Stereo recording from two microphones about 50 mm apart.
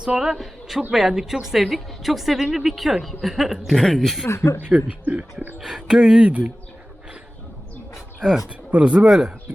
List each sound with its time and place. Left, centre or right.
0.0 s a woman's voice: centre
0.3 s a man's voice: centre
4.3 s speech: left
5.0 s speech: right
5.5 s a woman's voice: centre
6.0 s a woman's voice: centre
8.2 s a woman's voice: centre
8.4 s speech: right